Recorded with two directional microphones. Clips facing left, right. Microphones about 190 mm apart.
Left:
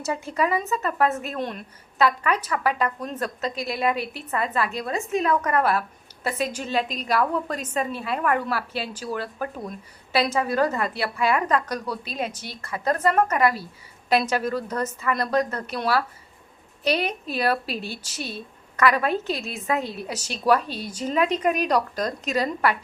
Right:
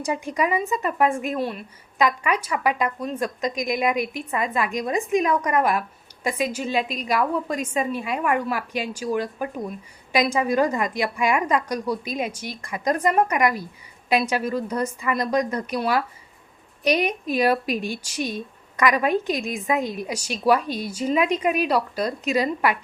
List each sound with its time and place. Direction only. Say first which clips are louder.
0.0 s a woman's voice: right 1 dB; 15° right (ahead or behind)